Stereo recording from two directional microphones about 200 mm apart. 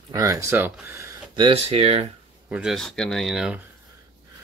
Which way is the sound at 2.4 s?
5° right (ahead or behind).